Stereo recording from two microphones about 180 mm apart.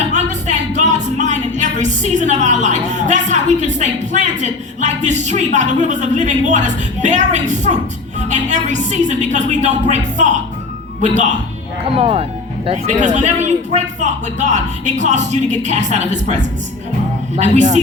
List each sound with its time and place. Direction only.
0.1 s music: 40° right (ahead or behind)
5.5 s speech: 40° right (ahead or behind)
11.9 s speech: 30° right (ahead or behind)